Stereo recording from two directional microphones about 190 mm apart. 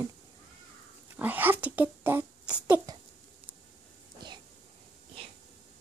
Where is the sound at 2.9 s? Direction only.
20° right (ahead or behind).